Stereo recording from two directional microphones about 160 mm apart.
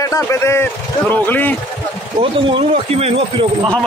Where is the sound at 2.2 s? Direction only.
35° right (ahead or behind).